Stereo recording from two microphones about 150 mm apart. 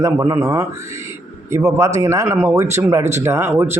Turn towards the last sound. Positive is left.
turn(degrees=-15)  # may be behind; listen again after turning